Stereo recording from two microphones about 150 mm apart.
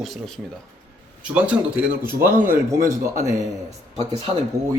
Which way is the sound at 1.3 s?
10° right (ahead or behind).